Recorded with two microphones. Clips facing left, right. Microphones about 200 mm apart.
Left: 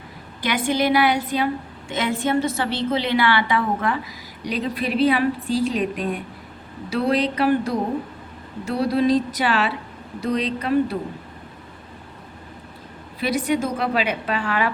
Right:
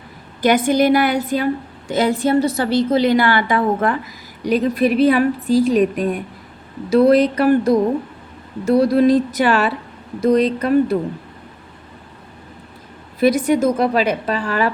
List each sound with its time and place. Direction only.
0.4 s a woman's voice: 45° right (ahead or behind)
13.1 s a woman's voice: 45° right (ahead or behind)